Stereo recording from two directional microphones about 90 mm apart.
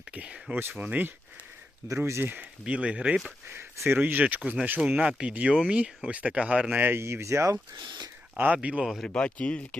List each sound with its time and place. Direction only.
0.1 s speech: 15° right (ahead or behind)
1.9 s speech: 30° right (ahead or behind); by 3.2 s 15° right (ahead or behind)
3.5 s speech: 25° right (ahead or behind); by 6.8 s 10° right (ahead or behind)
6.8 s speech: 25° right (ahead or behind)
7.8 s speech: 55° right (ahead or behind)
8.5 s speech: 10° right (ahead or behind)
9.0 s speech: 10° left (ahead or behind)